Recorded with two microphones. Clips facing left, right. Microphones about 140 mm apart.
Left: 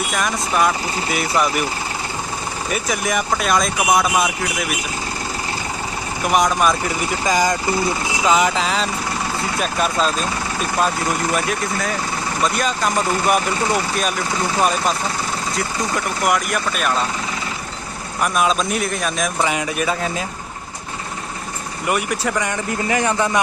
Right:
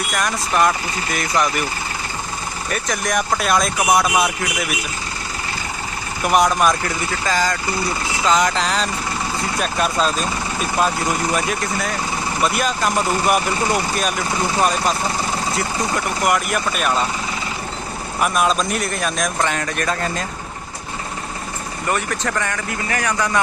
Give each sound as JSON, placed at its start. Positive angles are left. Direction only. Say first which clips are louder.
{"t": 0.1, "sound": "speech", "louder": "right 2 dB", "side_deg": 0}
{"t": 2.6, "sound": "speech", "louder": "left 1 dB", "side_deg": 5}
{"t": 6.2, "sound": "speech", "louder": "right 1 dB", "side_deg": 0}
{"t": 6.8, "sound": "speech", "louder": "left 2 dB", "side_deg": 15}
{"t": 18.2, "sound": "speech", "louder": "even", "side_deg": 0}
{"t": 21.8, "sound": "speech", "louder": "left 2 dB", "side_deg": 10}